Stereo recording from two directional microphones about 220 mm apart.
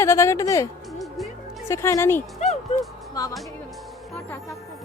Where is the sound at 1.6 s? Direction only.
15° left (ahead or behind).